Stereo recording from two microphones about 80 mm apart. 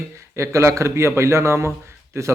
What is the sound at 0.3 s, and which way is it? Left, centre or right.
Speech, right.